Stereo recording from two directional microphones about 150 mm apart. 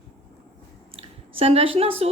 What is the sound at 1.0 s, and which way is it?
A woman's voice, 40° right (ahead or behind).